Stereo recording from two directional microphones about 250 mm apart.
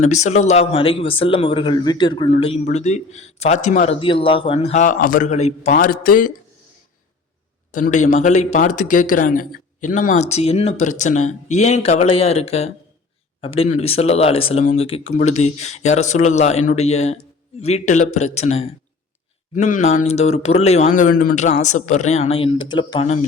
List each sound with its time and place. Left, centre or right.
0.0 s a man's voice: left
7.7 s a man's voice: left